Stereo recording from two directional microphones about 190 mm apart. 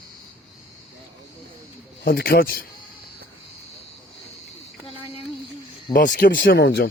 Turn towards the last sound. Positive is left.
turn(degrees=60)  # may be behind; listen again after turning